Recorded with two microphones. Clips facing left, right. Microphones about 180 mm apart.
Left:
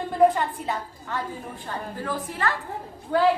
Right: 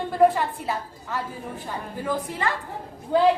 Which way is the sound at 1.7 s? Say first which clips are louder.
Right 2 dB; 15° right (ahead or behind).